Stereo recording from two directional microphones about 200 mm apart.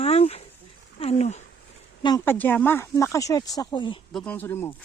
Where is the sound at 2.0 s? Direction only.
15° left (ahead or behind).